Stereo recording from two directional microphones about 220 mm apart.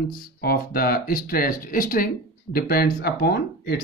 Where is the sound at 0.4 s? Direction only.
45° left (ahead or behind).